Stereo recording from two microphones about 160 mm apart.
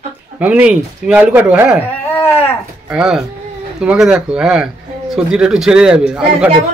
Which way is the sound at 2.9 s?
5° right (ahead or behind).